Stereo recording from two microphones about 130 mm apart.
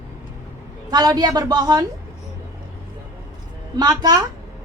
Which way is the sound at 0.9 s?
30° right (ahead or behind).